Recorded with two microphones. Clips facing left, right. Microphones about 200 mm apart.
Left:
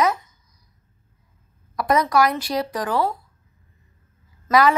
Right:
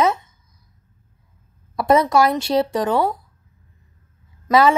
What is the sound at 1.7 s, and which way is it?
A woman's voice, 25° right (ahead or behind).